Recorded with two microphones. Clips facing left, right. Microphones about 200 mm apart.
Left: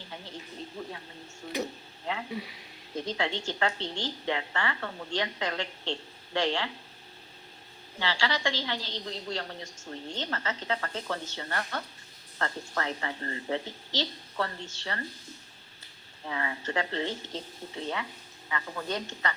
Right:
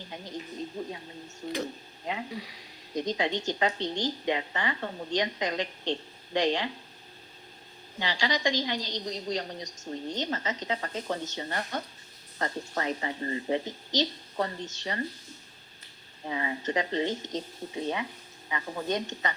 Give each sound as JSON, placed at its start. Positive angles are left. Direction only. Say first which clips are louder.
{"t": 0.8, "sound": "a woman's voice", "louder": "right 3 dB", "side_deg": -20}
{"t": 2.3, "sound": "speech", "louder": "left 2 dB", "side_deg": 25}
{"t": 2.9, "sound": "a woman's voice", "louder": "right 3 dB", "side_deg": -15}
{"t": 7.9, "sound": "a woman's voice", "louder": "right 1 dB", "side_deg": -15}
{"t": 16.2, "sound": "a woman's voice", "louder": "right 3 dB", "side_deg": -20}